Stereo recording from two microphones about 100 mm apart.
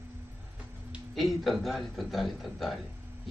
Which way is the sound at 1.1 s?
Centre (ahead or behind).